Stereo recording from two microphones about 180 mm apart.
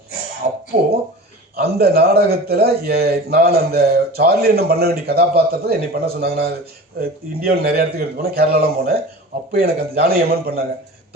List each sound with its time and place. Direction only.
0.4 s music: 40° right (ahead or behind)
1.5 s speech: 55° right (ahead or behind)